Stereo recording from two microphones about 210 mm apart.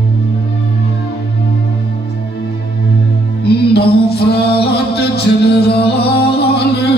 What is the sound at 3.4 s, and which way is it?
Music, 50° left (ahead or behind).